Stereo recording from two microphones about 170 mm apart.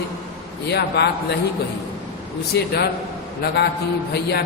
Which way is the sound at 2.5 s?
80° left.